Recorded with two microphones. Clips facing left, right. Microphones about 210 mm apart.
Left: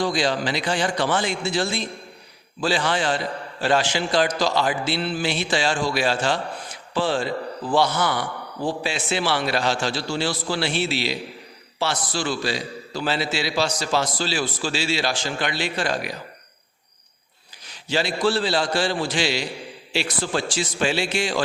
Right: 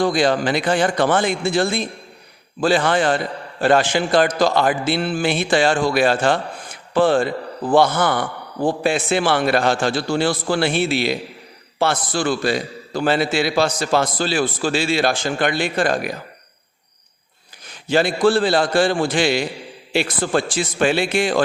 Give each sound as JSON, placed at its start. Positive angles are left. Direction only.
{"t": 0.0, "sound": "a man's voice", "side_deg": -55}
{"t": 17.7, "sound": "a man's voice", "side_deg": -55}